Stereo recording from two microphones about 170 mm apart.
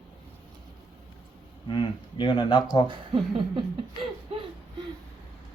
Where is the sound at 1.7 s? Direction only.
30° left (ahead or behind).